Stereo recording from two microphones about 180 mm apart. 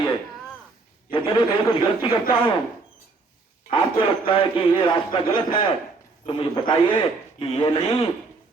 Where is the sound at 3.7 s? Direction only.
30° left (ahead or behind).